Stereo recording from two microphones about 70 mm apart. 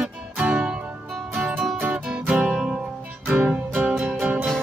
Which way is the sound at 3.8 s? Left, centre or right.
Centre.